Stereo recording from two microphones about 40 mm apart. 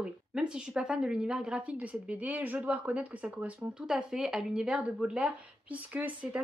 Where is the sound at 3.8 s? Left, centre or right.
Centre.